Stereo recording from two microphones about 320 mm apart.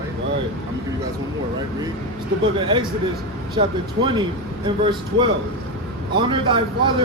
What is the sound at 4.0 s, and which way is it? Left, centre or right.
Speech, right.